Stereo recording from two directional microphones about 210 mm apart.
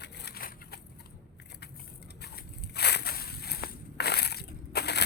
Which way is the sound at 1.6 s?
50° left (ahead or behind).